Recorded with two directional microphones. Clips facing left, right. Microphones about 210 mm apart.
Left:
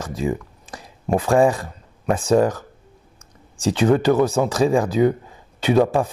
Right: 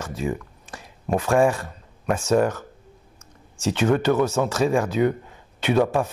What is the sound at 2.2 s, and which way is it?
Speech, 35° left (ahead or behind).